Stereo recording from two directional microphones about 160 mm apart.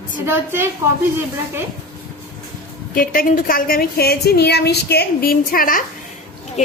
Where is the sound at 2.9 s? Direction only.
65° left (ahead or behind).